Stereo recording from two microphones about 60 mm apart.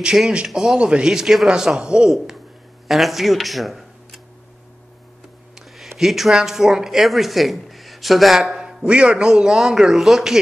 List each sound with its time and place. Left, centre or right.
0.0 s a man's voice: centre
0.7 s speech: centre
2.0 s speech: centre
5.8 s speech: centre